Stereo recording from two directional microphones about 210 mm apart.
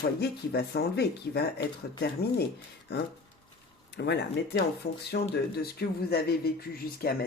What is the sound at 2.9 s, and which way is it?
Speech, 50° left (ahead or behind).